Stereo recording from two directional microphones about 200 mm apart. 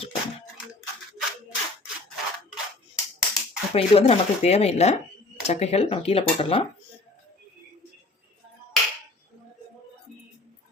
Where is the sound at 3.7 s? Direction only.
30° left (ahead or behind).